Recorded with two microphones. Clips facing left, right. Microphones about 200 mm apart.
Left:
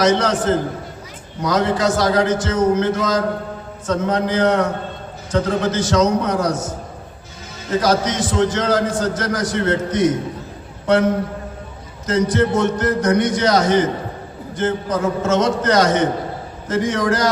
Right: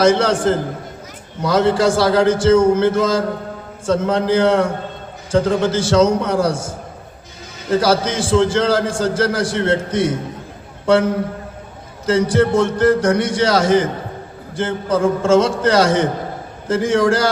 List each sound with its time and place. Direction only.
0.0 s a man's voice: 30° right (ahead or behind)
1.4 s a man's voice: 30° right (ahead or behind)
12.0 s a man's voice: 30° right (ahead or behind)